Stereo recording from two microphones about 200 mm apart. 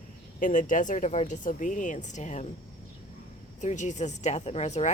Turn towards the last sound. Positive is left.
turn(degrees=35)  # may be behind; listen again after turning